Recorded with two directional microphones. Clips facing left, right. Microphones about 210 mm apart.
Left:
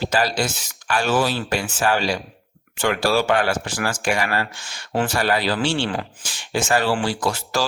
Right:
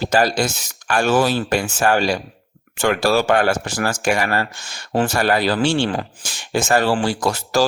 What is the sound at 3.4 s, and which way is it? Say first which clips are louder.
Speech: right 3 dB; 40° right (ahead or behind).